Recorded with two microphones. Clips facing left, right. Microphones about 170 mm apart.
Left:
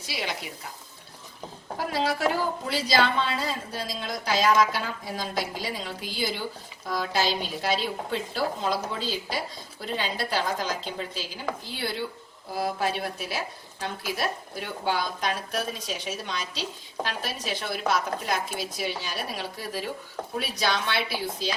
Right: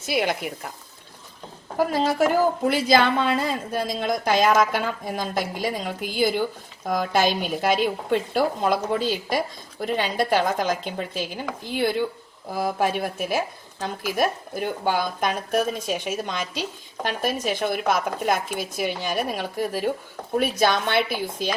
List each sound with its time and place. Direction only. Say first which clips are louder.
0.0 s speech: right 9 dB; 55° right (ahead or behind)
1.9 s speech: right 3 dB; 45° right (ahead or behind)